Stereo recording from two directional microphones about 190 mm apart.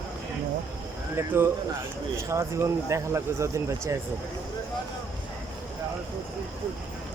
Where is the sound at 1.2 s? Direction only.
15° right (ahead or behind).